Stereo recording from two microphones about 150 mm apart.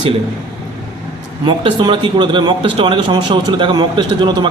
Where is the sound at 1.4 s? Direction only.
35° right (ahead or behind).